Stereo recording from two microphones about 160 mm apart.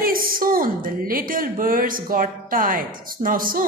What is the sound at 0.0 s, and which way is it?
A woman's voice, 65° right (ahead or behind).